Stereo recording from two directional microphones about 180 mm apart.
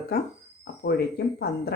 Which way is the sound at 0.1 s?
55° left (ahead or behind).